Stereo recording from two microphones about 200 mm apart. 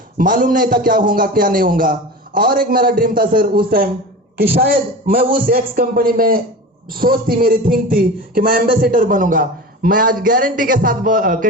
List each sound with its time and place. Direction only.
0.2 s a man's voice: 40° right (ahead or behind)